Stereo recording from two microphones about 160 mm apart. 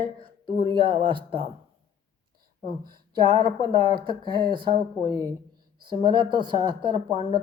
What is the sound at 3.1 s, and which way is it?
Speech, 30° right (ahead or behind).